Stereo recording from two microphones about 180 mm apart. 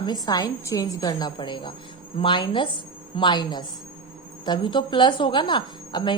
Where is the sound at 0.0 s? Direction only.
20° left (ahead or behind).